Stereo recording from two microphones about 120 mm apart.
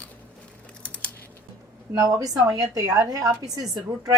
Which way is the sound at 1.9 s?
30° right (ahead or behind).